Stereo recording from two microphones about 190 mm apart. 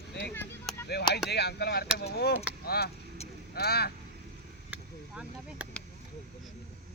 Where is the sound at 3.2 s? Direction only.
35° left (ahead or behind).